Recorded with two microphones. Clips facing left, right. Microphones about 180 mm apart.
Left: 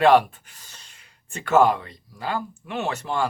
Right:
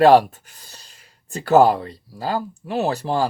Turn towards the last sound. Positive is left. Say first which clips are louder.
# right 5 dB
turn(degrees=-35)  # may be behind; listen again after turning